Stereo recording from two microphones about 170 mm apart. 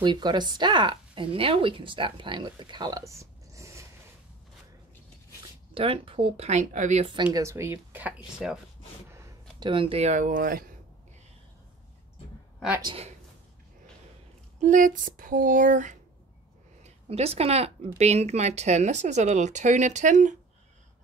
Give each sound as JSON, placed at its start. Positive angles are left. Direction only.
{"t": 0.0, "sound": "speech", "side_deg": -25}
{"t": 5.8, "sound": "speech", "side_deg": -30}
{"t": 7.3, "sound": "speech", "side_deg": -15}
{"t": 9.1, "sound": "a sound", "side_deg": -15}
{"t": 9.7, "sound": "speech", "side_deg": -30}
{"t": 12.8, "sound": "speech", "side_deg": -35}
{"t": 14.6, "sound": "speech", "side_deg": -50}
{"t": 16.8, "sound": "speech", "side_deg": -35}